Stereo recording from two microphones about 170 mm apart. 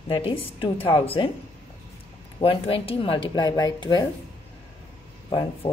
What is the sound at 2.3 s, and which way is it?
Speech, 35° left (ahead or behind).